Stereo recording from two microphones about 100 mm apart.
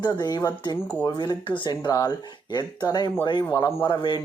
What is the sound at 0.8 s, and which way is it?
Speech, 20° left (ahead or behind).